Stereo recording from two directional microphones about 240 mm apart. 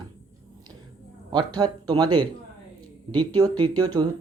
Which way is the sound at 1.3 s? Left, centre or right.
Centre.